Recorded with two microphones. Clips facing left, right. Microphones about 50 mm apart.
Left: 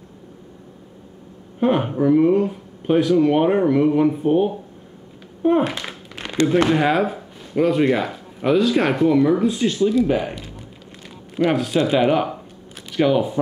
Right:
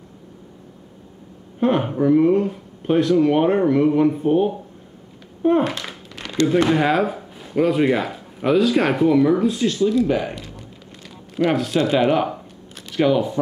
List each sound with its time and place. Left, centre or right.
1.6 s speech: centre
5.9 s a sound: left
6.7 s speech: centre
11.3 s speech: centre
12.7 s shuffling cards: centre